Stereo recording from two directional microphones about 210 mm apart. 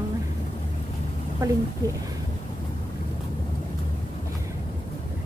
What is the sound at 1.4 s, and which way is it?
Speech, 15° right (ahead or behind).